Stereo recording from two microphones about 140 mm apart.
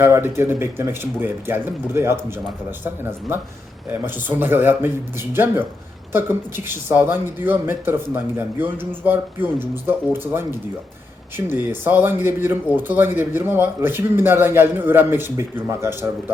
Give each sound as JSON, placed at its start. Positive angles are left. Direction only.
{"t": 0.0, "sound": "speech", "side_deg": -15}